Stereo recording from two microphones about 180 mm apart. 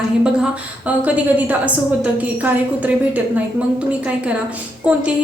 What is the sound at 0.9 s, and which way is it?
A woman's voice, 10° right (ahead or behind).